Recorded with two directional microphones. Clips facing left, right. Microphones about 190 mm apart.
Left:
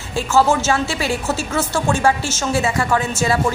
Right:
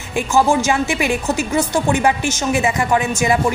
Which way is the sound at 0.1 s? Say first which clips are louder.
Right 1 dB; 15° right (ahead or behind).